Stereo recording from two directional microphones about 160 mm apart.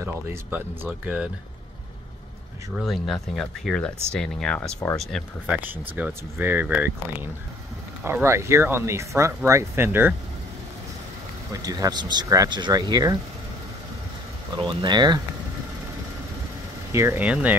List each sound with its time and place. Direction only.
0.0 s speech: 15° right (ahead or behind)
2.8 s speech: centre (ahead or behind)
5.6 s speech: 10° right (ahead or behind)
11.5 s speech: 20° right (ahead or behind)
14.6 s speech: 30° right (ahead or behind)
16.9 s speech: 15° right (ahead or behind)